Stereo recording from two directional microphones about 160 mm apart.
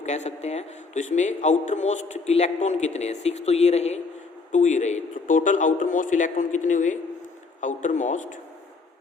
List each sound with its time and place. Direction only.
0.0 s a man's voice: 45° left (ahead or behind)